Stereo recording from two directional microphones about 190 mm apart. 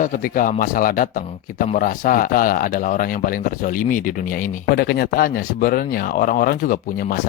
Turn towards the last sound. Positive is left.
turn(degrees=50)  # may be behind; listen again after turning